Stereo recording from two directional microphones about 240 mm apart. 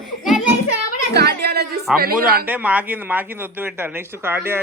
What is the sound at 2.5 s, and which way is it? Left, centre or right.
Speech, centre.